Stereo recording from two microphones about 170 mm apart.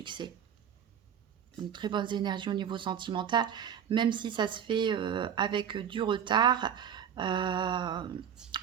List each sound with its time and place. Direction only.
0.0 s speech: 30° right (ahead or behind)
1.7 s speech: 25° right (ahead or behind)